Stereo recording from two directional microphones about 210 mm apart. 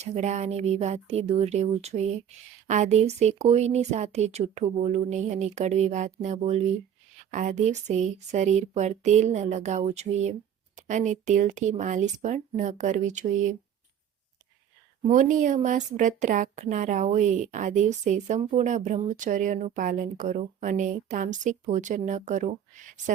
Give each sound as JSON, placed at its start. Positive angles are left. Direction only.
{"t": 0.0, "sound": "a woman's voice", "side_deg": -35}
{"t": 15.1, "sound": "a woman's voice", "side_deg": -40}